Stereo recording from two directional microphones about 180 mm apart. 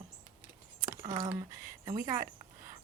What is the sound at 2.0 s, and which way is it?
Speech, 45° right (ahead or behind).